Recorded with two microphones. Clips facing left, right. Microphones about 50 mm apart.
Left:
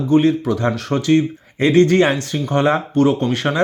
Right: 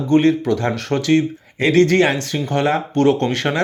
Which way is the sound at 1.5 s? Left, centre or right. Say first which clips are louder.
Left 1 dB; left.